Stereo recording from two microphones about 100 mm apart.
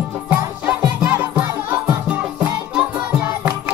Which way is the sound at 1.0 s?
15° right (ahead or behind).